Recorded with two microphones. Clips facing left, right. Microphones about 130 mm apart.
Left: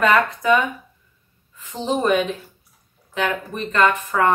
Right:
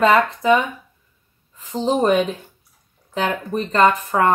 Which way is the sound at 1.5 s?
35° right (ahead or behind).